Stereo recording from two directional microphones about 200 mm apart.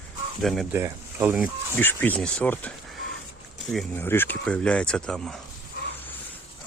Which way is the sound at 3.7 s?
5° left (ahead or behind).